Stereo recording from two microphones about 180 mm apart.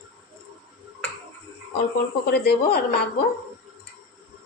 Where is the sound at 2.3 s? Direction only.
65° left (ahead or behind).